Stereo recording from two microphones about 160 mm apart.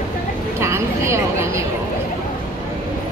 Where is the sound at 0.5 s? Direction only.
15° right (ahead or behind).